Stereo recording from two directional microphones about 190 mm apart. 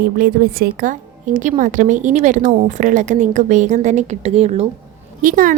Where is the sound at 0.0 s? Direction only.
50° right (ahead or behind); by 4.6 s 30° right (ahead or behind).